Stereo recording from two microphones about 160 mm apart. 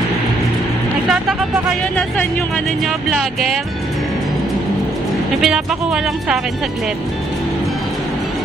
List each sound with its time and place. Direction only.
3.1 s speech: centre (ahead or behind)
5.4 s speech: 5° right (ahead or behind)